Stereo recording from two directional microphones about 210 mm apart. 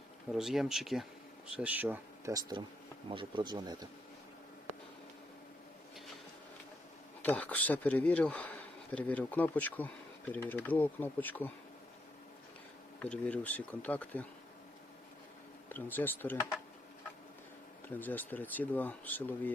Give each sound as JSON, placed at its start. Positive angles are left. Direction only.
{"t": 0.3, "sound": "speech", "side_deg": 0}
{"t": 7.2, "sound": "speech", "side_deg": 5}
{"t": 13.0, "sound": "speech", "side_deg": 5}
{"t": 15.7, "sound": "speech", "side_deg": 10}
{"t": 17.8, "sound": "speech", "side_deg": 10}